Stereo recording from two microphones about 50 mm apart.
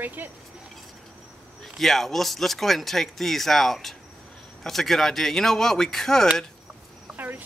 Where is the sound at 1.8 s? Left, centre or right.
Centre.